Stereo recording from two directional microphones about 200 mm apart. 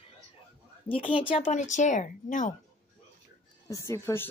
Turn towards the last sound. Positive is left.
turn(degrees=10)  # may be behind; listen again after turning